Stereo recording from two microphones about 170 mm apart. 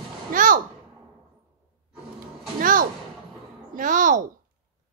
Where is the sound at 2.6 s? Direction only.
55° right (ahead or behind).